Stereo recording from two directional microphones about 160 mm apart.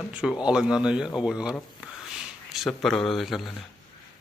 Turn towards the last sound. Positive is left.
turn(degrees=0)  # may be behind; listen again after turning